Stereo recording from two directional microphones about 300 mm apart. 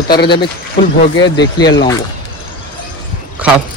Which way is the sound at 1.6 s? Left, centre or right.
Centre.